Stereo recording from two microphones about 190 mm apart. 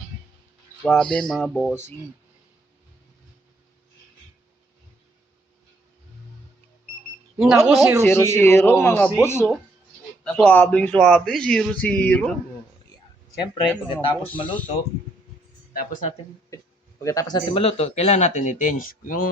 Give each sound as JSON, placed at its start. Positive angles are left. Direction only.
{"t": 0.8, "sound": "speech", "side_deg": 0}
{"t": 7.3, "sound": "speech", "side_deg": -5}
{"t": 8.0, "sound": "speech", "side_deg": 15}
{"t": 13.9, "sound": "speech", "side_deg": 25}
{"t": 14.4, "sound": "speech", "side_deg": 5}
{"t": 15.7, "sound": "speech", "side_deg": 45}
{"t": 17.0, "sound": "speech", "side_deg": 15}